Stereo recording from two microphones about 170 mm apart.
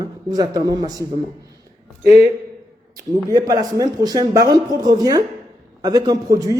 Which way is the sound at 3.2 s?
20° right (ahead or behind).